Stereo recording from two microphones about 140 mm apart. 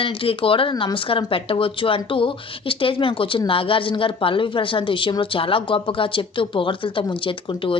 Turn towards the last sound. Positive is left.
turn(degrees=35)  # may be behind; listen again after turning